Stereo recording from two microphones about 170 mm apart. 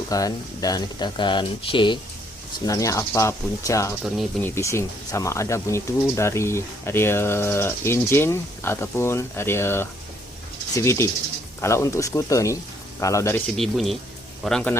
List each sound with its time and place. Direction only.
0.1 s speech: 20° left (ahead or behind)
13.6 s speech: centre (ahead or behind)